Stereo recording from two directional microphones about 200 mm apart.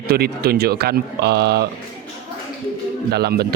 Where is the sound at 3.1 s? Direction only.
50° right (ahead or behind).